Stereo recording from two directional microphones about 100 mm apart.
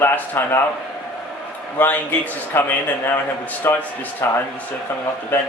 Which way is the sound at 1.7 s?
15° left (ahead or behind).